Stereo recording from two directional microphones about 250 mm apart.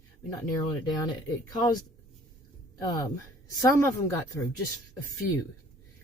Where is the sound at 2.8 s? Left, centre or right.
Centre.